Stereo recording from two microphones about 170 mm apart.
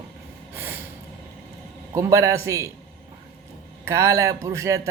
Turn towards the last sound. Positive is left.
turn(degrees=-20)  # may be behind; listen again after turning